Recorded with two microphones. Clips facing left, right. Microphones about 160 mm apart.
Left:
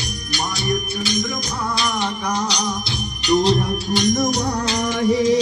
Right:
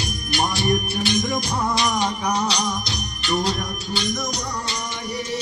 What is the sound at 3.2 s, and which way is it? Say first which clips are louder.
Music: left 7 dB; 20° left (ahead or behind).